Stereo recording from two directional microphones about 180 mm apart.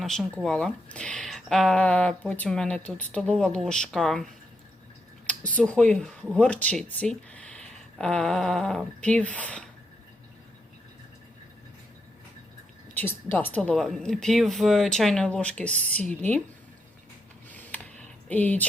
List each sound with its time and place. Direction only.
0.0 s speech: centre (ahead or behind)
5.5 s speech: 5° left (ahead or behind)
12.9 s speech: 10° left (ahead or behind)
17.5 s a sound: 10° left (ahead or behind)